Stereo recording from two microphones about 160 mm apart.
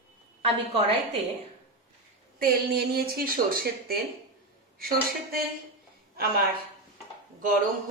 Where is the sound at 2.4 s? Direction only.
70° right (ahead or behind).